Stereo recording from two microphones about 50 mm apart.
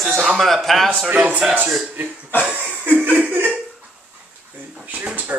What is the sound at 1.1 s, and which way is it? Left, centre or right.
Chuckle, right.